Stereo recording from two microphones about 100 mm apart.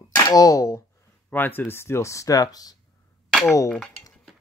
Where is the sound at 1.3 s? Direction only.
20° left (ahead or behind); by 2.8 s 40° left (ahead or behind).